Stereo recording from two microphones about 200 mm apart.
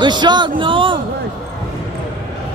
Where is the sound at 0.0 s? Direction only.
20° right (ahead or behind).